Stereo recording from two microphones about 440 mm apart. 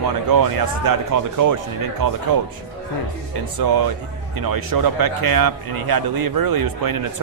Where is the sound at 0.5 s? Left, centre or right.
Right.